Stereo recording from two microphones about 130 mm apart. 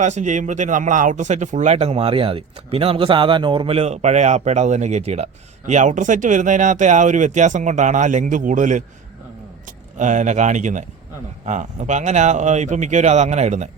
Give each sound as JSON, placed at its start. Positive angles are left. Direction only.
{"t": 0.0, "sound": "speech", "side_deg": -65}